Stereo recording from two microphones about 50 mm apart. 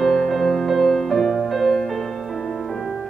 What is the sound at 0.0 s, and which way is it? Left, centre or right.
Music, centre.